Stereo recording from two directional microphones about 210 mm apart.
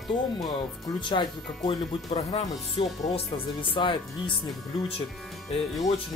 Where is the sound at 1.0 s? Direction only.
20° left (ahead or behind).